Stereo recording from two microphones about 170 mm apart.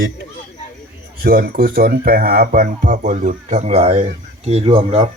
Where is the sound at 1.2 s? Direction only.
60° right (ahead or behind).